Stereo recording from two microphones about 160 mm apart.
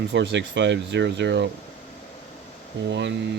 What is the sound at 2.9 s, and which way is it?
Speech, 90° right.